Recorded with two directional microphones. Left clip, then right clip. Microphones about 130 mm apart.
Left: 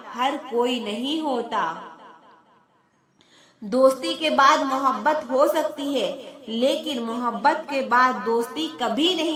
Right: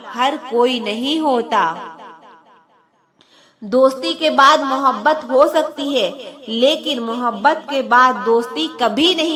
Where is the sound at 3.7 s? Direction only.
25° right (ahead or behind).